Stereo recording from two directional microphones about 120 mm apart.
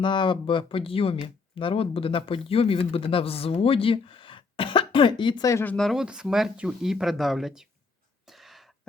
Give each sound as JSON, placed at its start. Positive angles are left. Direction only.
{"t": 0.0, "sound": "speech", "side_deg": 40}
{"t": 5.6, "sound": "speech", "side_deg": 5}
{"t": 8.3, "sound": "a sound", "side_deg": 0}